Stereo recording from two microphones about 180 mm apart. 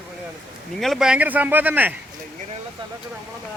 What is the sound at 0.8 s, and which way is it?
Speech, centre (ahead or behind).